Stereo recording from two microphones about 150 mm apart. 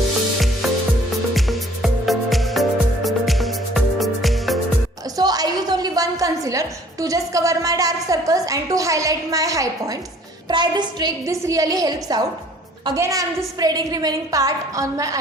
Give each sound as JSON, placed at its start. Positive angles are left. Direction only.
{"t": 1.4, "sound": "music", "side_deg": 0}
{"t": 5.1, "sound": "a woman's voice", "side_deg": -25}